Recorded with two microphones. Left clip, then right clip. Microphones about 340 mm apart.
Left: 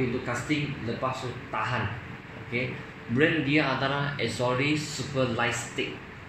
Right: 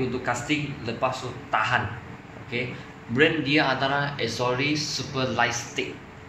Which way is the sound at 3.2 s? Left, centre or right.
Right.